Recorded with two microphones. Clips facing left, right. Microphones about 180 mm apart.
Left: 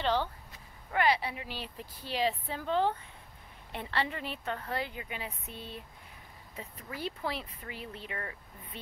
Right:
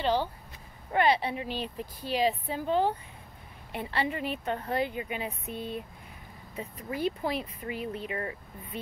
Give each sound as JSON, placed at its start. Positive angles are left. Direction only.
{"t": 0.0, "sound": "speech", "side_deg": -10}
{"t": 0.9, "sound": "a woman's voice", "side_deg": -25}